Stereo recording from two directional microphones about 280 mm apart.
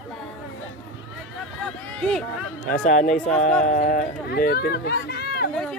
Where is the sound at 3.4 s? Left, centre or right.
Centre.